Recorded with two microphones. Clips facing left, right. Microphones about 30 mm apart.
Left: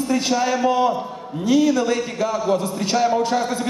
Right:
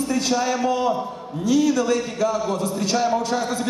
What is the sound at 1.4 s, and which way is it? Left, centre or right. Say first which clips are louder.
A woman's voice: left 2 dB; left.